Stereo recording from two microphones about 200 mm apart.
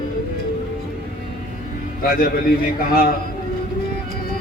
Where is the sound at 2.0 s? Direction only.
50° left (ahead or behind).